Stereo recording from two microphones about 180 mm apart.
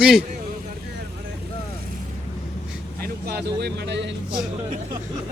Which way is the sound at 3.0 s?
60° right (ahead or behind).